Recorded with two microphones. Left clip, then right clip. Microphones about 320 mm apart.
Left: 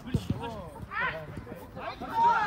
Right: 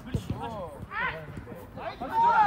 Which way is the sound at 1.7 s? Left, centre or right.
Right.